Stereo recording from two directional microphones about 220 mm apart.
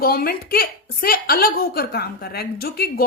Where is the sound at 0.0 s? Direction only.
45° left (ahead or behind).